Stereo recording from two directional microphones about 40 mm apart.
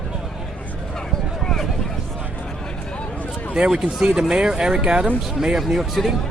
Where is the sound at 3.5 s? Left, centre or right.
Right.